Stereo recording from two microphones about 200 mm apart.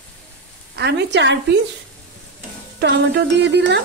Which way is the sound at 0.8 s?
60° right (ahead or behind).